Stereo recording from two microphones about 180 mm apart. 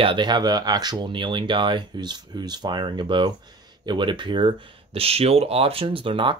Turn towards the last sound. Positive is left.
turn(degrees=-30)  # may be behind; listen again after turning